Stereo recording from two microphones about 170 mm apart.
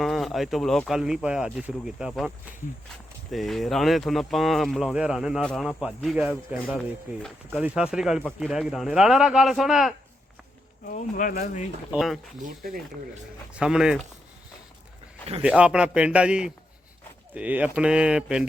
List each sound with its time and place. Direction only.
0.0 s speech: centre (ahead or behind)
3.3 s speech: centre (ahead or behind)
10.8 s speech: 55° left (ahead or behind)
11.9 s speech: centre (ahead or behind)
12.4 s speech: 60° right (ahead or behind)
13.5 s speech: 5° right (ahead or behind)
15.4 s speech: 5° right (ahead or behind)